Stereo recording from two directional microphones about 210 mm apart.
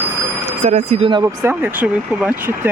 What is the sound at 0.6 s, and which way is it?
Speech, 30° right (ahead or behind).